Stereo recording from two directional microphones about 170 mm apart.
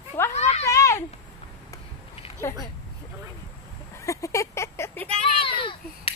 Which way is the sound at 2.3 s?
15° left (ahead or behind).